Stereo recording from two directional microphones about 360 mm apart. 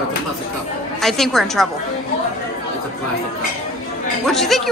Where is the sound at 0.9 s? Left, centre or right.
Centre.